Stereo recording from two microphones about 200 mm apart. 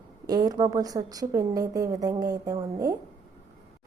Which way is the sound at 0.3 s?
20° right (ahead or behind).